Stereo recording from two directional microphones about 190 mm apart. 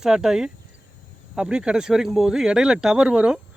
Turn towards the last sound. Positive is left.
turn(degrees=-5)  # may be behind; listen again after turning